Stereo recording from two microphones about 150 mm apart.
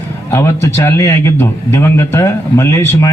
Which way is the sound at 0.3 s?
20° left (ahead or behind).